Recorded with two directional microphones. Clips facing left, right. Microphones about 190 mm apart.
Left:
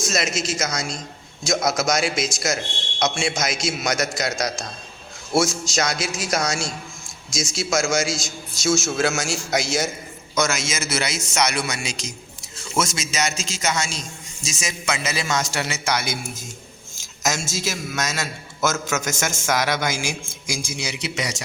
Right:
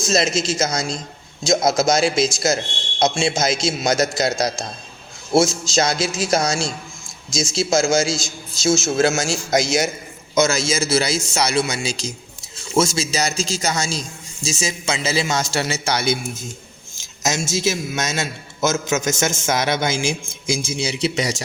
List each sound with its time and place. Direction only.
0.0 s a man's voice: 30° right (ahead or behind)
9.5 s a man's voice: 45° right (ahead or behind)
10.3 s a man's voice: 30° right (ahead or behind)